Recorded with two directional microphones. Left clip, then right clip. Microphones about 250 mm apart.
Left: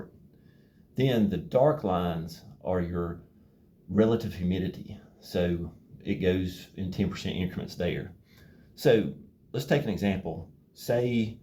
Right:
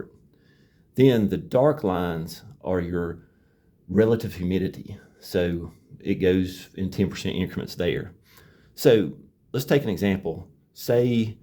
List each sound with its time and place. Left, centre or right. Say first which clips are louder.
0.9 s speech: right 8 dB; right